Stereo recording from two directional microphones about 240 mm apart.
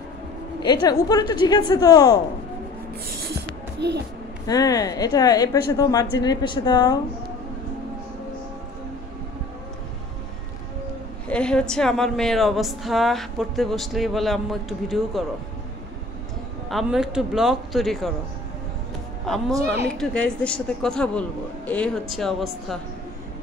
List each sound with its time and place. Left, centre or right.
0.6 s a woman's voice: centre
3.8 s speech: right
4.5 s a woman's voice: centre
11.2 s a woman's voice: centre
16.6 s a woman's voice: centre
20.0 s a woman's voice: centre